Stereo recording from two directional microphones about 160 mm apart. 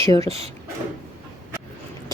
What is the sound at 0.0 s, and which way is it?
Speech, 20° left (ahead or behind).